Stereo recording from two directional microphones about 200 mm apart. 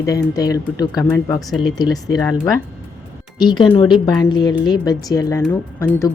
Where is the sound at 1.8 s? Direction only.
20° left (ahead or behind).